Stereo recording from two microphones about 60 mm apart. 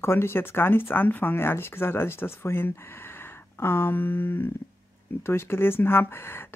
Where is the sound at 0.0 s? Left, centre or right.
Left.